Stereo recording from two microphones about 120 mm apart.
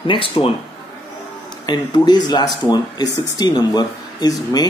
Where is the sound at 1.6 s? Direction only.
35° left (ahead or behind).